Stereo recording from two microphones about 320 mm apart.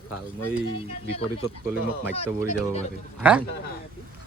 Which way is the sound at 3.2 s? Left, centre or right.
Centre.